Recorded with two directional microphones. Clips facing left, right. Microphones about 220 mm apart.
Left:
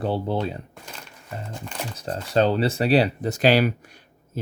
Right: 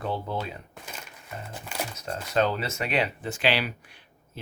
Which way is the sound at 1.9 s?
30° left (ahead or behind).